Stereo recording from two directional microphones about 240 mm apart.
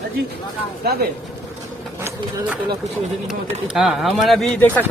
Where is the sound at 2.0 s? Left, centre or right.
Centre.